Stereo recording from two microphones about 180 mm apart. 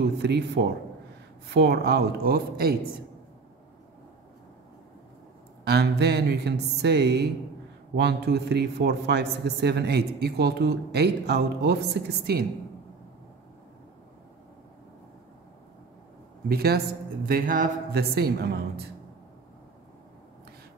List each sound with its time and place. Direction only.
0.0 s speech: 65° right (ahead or behind)
5.7 s a man's voice: 65° right (ahead or behind)
16.4 s speech: 60° right (ahead or behind)